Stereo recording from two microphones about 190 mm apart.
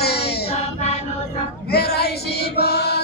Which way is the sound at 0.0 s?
55° left (ahead or behind).